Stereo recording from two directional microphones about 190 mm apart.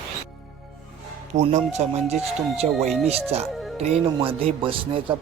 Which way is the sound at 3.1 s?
30° right (ahead or behind).